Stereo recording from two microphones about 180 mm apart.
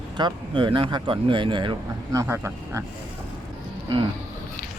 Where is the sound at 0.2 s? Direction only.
25° right (ahead or behind).